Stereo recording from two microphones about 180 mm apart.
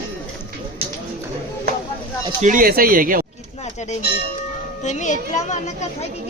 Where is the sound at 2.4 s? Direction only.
45° right (ahead or behind).